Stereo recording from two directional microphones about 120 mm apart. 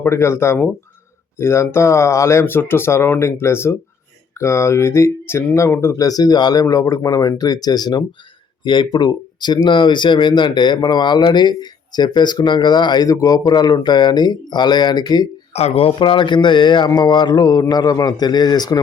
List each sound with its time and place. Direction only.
0.0 s speech: 20° left (ahead or behind)
15.5 s speech: 55° left (ahead or behind); by 18.8 s 35° left (ahead or behind)